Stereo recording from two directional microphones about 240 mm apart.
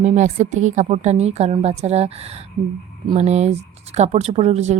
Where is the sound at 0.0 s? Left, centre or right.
Right.